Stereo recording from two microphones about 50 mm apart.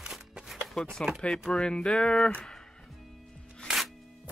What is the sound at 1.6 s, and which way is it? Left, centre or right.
Music, centre.